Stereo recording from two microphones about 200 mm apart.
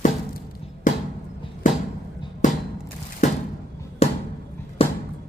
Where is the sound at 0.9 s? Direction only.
40° left (ahead or behind).